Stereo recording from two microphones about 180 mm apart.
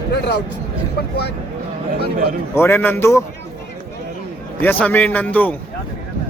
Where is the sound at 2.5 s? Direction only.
10° left (ahead or behind).